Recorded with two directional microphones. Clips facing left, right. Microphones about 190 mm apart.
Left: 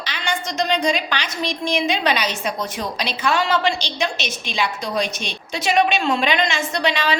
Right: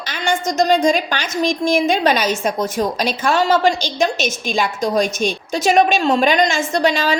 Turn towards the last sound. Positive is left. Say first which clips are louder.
# right 4 dB
turn(degrees=-45)  # may be behind; listen again after turning